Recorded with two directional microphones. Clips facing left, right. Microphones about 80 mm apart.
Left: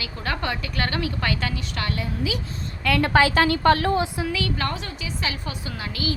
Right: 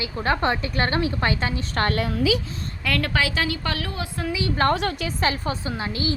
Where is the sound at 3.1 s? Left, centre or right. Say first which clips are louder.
Left 6 dB; left.